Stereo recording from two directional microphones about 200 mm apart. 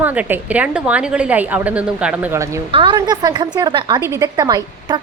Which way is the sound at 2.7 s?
25° right (ahead or behind).